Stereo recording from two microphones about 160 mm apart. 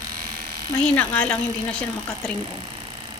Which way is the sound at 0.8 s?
10° left (ahead or behind).